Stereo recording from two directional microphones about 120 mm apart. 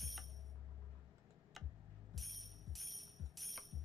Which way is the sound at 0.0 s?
Centre (ahead or behind).